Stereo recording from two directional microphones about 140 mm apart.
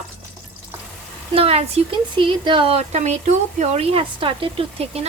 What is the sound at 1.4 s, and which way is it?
Speech, 45° right (ahead or behind).